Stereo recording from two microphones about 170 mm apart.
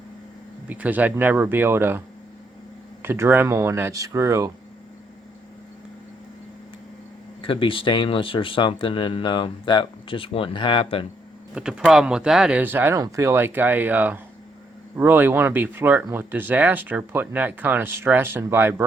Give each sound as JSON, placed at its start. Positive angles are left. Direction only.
{"t": 0.7, "sound": "speech", "side_deg": -10}
{"t": 3.0, "sound": "speech", "side_deg": -15}
{"t": 7.4, "sound": "speech", "side_deg": 30}
{"t": 11.5, "sound": "speech", "side_deg": -5}